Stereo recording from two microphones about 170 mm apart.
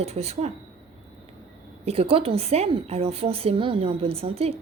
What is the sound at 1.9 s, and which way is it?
A woman's voice, 35° right (ahead or behind).